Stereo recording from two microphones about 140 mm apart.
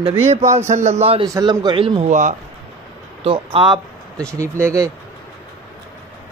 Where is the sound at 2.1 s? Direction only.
60° right (ahead or behind).